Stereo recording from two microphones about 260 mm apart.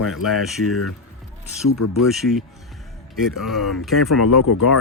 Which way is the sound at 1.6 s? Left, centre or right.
Left.